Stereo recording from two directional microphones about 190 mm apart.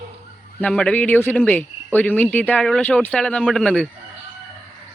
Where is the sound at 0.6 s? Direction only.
5° left (ahead or behind).